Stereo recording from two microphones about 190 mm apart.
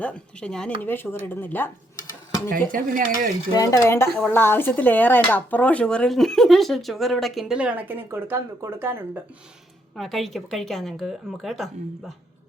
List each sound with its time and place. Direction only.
0.0 s speech: 5° left (ahead or behind)
2.7 s speech: 45° right (ahead or behind)
3.5 s speech: 20° left (ahead or behind); by 9.2 s 10° right (ahead or behind)
9.9 s speech: centre (ahead or behind)